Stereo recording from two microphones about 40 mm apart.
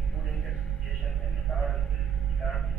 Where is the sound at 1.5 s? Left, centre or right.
Centre.